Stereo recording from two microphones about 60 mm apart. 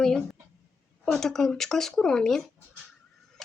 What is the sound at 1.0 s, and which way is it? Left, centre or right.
Speech, centre.